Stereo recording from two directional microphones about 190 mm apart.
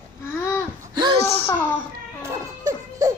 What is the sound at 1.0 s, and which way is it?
Speech, 25° right (ahead or behind).